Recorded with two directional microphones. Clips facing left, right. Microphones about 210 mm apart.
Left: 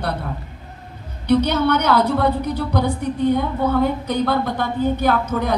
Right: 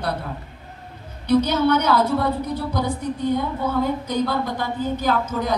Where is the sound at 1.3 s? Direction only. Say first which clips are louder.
Left 1 dB; 60° left (ahead or behind).